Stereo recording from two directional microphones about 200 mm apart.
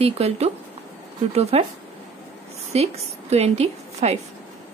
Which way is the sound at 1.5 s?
30° right (ahead or behind).